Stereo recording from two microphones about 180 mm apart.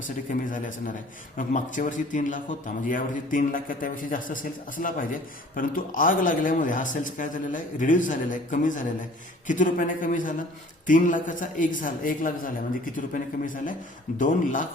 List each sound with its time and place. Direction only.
0.5 s a man's voice: 45° left (ahead or behind)